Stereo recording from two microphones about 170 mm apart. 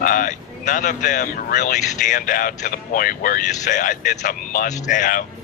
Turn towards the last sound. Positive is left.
turn(degrees=50)  # may be behind; listen again after turning